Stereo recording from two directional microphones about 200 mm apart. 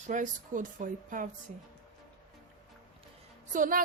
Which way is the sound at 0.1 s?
40° right (ahead or behind).